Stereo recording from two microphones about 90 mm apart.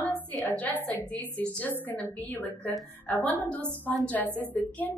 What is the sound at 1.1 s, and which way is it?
A woman's voice, 15° left (ahead or behind).